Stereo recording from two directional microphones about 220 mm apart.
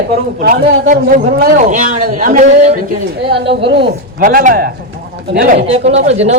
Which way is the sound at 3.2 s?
50° right (ahead or behind).